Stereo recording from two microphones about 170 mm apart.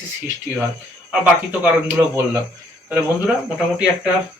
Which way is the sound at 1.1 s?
10° right (ahead or behind).